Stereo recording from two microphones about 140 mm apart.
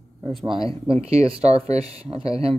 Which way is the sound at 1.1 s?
45° right (ahead or behind).